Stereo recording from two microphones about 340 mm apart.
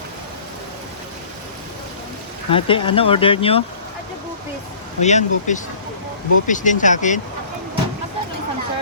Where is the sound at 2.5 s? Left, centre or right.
Centre.